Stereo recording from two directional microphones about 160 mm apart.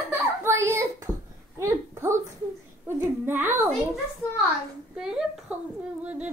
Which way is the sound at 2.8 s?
15° right (ahead or behind).